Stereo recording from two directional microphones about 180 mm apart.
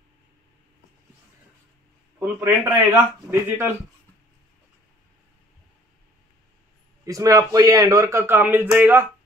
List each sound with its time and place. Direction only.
2.1 s a man's voice: 15° right (ahead or behind)
7.1 s a man's voice: 20° right (ahead or behind)